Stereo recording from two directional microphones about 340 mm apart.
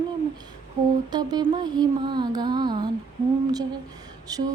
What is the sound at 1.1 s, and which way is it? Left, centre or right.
Speech, centre.